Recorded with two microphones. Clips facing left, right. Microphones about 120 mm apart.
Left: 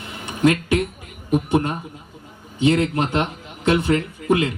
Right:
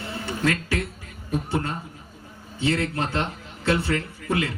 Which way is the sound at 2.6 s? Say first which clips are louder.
Left 6 dB; 20° left (ahead or behind).